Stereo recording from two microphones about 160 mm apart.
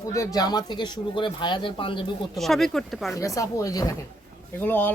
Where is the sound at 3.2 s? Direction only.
20° left (ahead or behind).